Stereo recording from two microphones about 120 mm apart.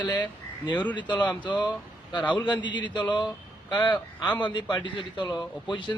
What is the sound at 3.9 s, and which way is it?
Speech, 15° left (ahead or behind).